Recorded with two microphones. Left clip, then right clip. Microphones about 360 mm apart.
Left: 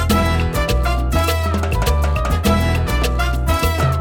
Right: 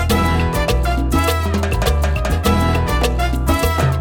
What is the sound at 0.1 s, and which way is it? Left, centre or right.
Music, right.